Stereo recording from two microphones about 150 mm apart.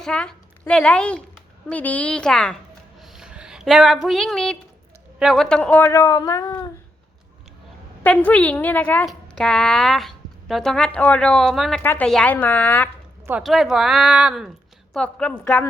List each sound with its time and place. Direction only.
0.0 s a woman's voice: 5° left (ahead or behind)
3.0 s a sound: 5° right (ahead or behind)
5.2 s a woman's voice: centre (ahead or behind); by 6.7 s 25° left (ahead or behind)
8.0 s a woman's voice: 10° left (ahead or behind)
11.8 s a woman's voice: 10° left (ahead or behind)
13.4 s a woman's voice: centre (ahead or behind)
14.9 s a woman's voice: 5° left (ahead or behind)